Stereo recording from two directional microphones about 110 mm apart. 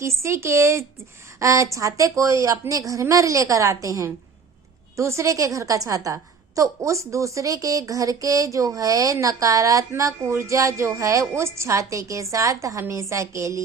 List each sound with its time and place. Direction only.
0.2 s speech: 25° right (ahead or behind)